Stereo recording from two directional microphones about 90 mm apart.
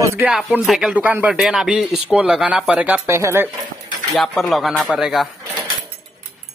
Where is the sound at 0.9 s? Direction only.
15° right (ahead or behind).